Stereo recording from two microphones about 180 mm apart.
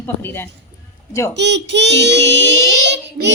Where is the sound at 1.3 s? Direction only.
75° right (ahead or behind).